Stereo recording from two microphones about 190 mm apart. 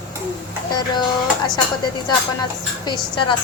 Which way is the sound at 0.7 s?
20° left (ahead or behind).